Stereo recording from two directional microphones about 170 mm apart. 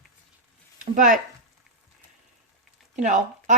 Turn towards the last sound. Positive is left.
turn(degrees=-45)  # may be behind; listen again after turning